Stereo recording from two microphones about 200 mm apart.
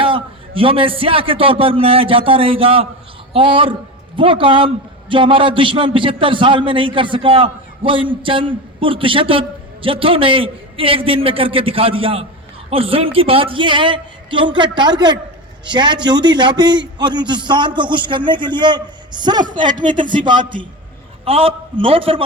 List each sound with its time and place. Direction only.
0.0 s a man's voice: 25° right (ahead or behind)